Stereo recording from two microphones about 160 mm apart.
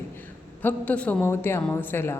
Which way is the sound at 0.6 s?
10° left (ahead or behind).